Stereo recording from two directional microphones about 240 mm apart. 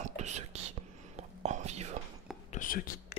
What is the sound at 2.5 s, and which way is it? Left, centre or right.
Whispering, left.